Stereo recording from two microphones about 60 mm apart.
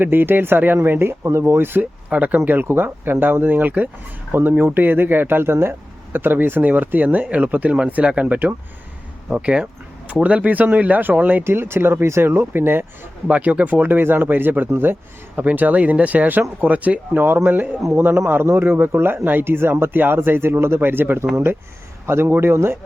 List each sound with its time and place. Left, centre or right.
0.0 s speech: right
1.5 s speech: right
1.8 s speech: right
11.4 s speech: right
13.2 s speech: right
15.4 s speech: right